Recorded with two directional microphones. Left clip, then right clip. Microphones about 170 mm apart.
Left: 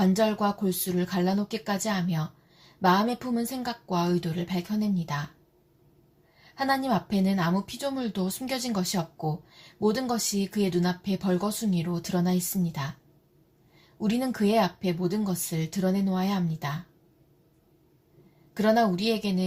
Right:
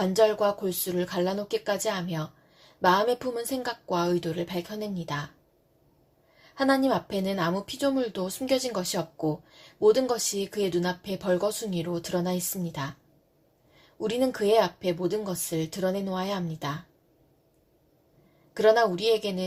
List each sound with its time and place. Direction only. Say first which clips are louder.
0.0 s speech: right 3 dB; 35° right (ahead or behind)
6.7 s speech: right 2 dB; 40° right (ahead or behind)
14.0 s speech: right 3 dB; 40° right (ahead or behind)
18.5 s speech: right 3 dB; 40° right (ahead or behind)